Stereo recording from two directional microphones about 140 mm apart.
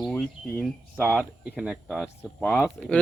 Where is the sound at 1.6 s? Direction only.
5° right (ahead or behind).